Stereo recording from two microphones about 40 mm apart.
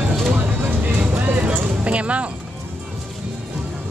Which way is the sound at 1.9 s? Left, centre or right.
Right.